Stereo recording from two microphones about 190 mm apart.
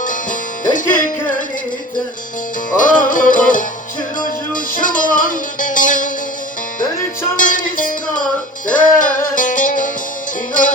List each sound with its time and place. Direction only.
0.0 s music: 45° left (ahead or behind)
2.8 s music: 45° left (ahead or behind)
7.3 s music: 45° left (ahead or behind)